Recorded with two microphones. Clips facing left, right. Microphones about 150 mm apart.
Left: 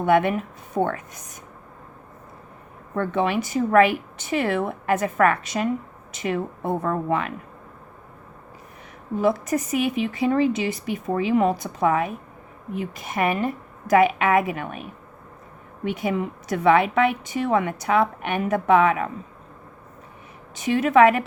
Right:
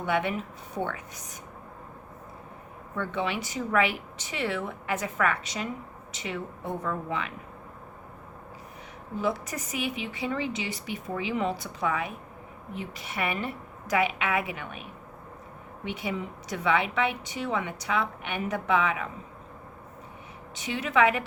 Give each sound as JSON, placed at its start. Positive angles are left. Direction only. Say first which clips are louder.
{"t": 0.0, "sound": "a woman's voice", "louder": "left 8 dB", "side_deg": 55}
{"t": 2.9, "sound": "a woman's voice", "louder": "left 8 dB", "side_deg": 50}
{"t": 9.2, "sound": "a woman's voice", "louder": "left 9 dB", "side_deg": 50}
{"t": 20.6, "sound": "a woman's voice", "louder": "left 8 dB", "side_deg": 50}